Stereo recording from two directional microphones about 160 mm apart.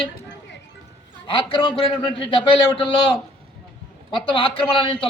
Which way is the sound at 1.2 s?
30° left (ahead or behind).